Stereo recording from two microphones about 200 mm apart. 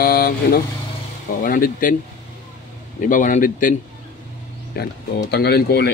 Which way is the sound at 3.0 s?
40° left (ahead or behind).